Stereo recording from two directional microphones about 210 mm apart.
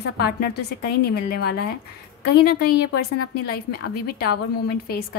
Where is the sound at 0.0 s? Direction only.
50° left (ahead or behind).